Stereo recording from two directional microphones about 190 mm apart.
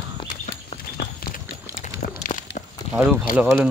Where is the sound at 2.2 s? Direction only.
40° left (ahead or behind).